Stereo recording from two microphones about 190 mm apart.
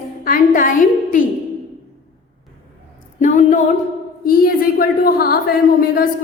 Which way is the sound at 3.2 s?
40° left (ahead or behind).